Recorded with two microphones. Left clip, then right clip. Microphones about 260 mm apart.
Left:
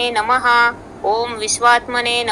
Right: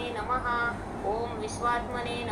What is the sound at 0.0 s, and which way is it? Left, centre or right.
Speech, left.